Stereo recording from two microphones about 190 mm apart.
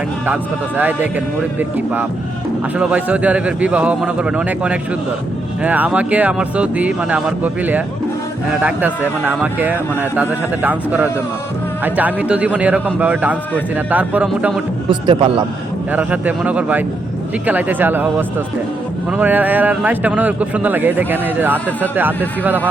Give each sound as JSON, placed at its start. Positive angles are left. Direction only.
{"t": 0.8, "sound": "a man's voice", "side_deg": -10}
{"t": 14.8, "sound": "a man's voice", "side_deg": -25}
{"t": 15.9, "sound": "a man's voice", "side_deg": -10}